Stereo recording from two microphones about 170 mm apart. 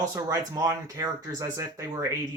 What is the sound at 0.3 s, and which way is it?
Speech, 20° right (ahead or behind).